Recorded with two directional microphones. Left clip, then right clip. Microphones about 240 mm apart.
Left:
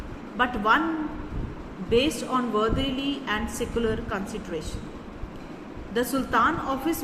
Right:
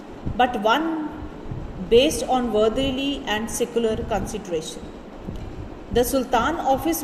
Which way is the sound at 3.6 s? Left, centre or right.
Centre.